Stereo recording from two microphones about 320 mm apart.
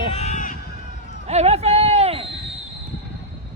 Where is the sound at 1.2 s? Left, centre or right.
Centre.